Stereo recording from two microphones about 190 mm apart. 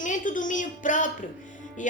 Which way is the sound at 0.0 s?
40° left (ahead or behind).